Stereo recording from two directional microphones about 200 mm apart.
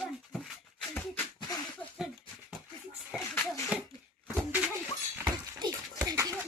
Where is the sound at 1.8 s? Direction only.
Centre (ahead or behind).